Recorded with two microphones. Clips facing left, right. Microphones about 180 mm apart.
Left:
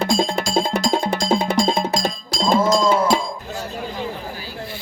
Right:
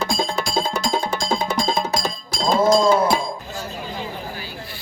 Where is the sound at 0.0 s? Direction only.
65° left (ahead or behind).